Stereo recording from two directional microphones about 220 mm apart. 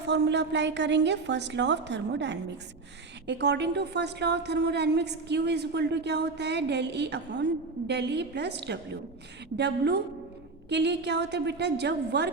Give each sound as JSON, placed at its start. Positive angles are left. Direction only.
{"t": 0.0, "sound": "a woman's voice", "side_deg": -50}